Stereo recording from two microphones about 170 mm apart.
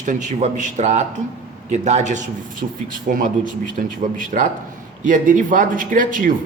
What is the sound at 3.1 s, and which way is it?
Speech, 60° right (ahead or behind).